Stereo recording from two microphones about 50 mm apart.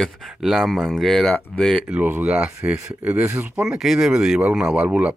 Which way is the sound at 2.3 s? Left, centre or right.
Right.